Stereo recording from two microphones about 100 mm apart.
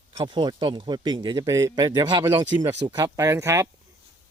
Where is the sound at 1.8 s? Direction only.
45° right (ahead or behind).